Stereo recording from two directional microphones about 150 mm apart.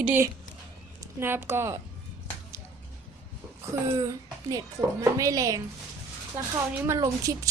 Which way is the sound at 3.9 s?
25° right (ahead or behind).